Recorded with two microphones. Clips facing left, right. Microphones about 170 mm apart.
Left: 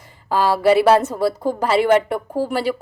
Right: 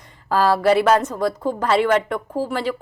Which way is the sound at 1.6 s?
10° left (ahead or behind).